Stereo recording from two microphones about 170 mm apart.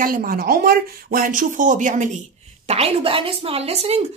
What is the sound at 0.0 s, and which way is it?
Speech, 55° right (ahead or behind).